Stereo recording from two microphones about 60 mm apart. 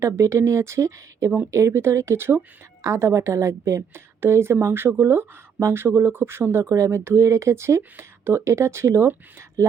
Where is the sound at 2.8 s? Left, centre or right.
Right.